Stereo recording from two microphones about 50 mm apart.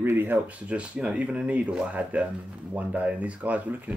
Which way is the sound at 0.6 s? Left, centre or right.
Right.